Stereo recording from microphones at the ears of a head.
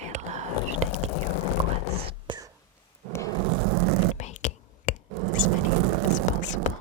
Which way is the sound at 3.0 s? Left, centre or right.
Right.